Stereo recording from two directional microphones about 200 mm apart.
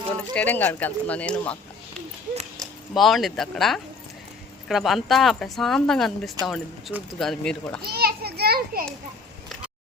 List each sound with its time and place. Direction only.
0.3 s speech: 10° left (ahead or behind)
2.6 s speech: centre (ahead or behind)
7.8 s a child's voice: 50° right (ahead or behind)